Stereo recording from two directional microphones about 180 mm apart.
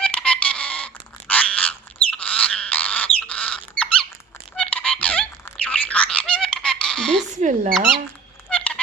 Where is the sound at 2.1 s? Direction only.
5° left (ahead or behind).